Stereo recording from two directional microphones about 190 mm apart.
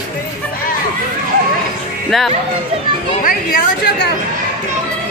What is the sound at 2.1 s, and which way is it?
Speech, centre (ahead or behind).